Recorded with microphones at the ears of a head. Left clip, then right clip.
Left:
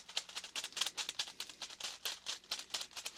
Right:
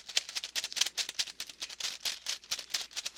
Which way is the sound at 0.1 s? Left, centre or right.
Right.